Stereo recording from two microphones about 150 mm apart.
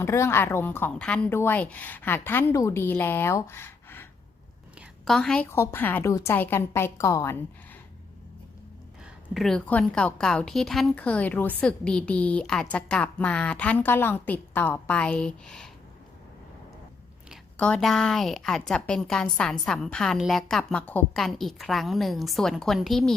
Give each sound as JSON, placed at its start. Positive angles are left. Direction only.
{"t": 0.0, "sound": "a woman's voice", "side_deg": 20}
{"t": 5.0, "sound": "a woman's voice", "side_deg": 5}
{"t": 5.5, "sound": "a woman's voice", "side_deg": 15}
{"t": 9.3, "sound": "a woman's voice", "side_deg": 0}
{"t": 17.6, "sound": "a woman's voice", "side_deg": 5}